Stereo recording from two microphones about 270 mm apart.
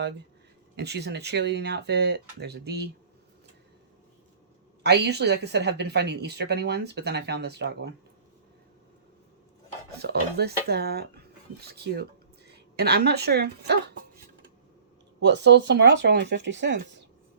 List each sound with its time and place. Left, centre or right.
0.8 s speech: right
4.8 s speech: right
10.0 s speech: right
15.2 s speech: right